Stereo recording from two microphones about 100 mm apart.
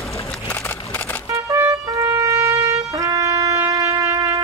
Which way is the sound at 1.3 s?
30° right (ahead or behind).